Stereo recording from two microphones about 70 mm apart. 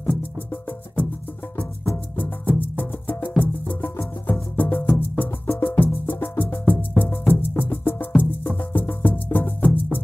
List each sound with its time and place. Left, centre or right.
0.1 s music: left
2.1 s music: left